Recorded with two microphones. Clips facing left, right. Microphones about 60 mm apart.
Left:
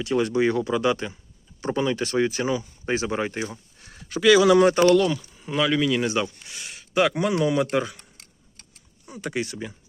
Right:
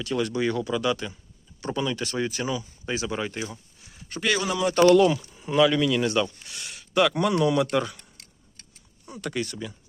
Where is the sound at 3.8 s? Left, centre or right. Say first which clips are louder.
Left 3 dB; left.